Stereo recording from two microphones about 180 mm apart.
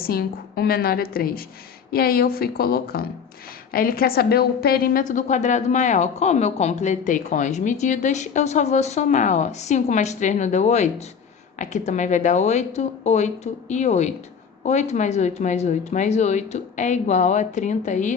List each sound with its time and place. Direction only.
0.0 s a woman's voice: 55° left (ahead or behind)